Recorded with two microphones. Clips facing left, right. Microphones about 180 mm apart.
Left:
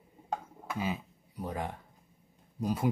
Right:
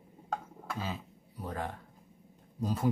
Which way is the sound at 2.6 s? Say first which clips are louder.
Left 2 dB; 10° left (ahead or behind).